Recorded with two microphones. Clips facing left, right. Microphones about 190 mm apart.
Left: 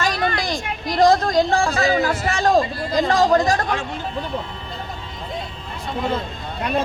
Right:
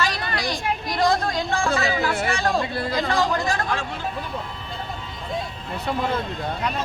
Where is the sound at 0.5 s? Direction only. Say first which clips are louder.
Left 2 dB; 45° left (ahead or behind).